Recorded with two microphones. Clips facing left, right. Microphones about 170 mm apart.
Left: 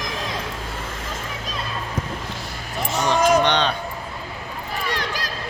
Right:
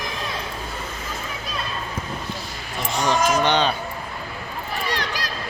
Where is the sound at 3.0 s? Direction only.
Centre (ahead or behind).